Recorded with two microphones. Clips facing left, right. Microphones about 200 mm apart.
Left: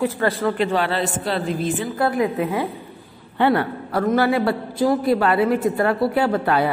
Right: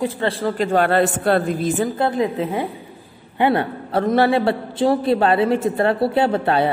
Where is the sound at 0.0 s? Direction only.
25° right (ahead or behind).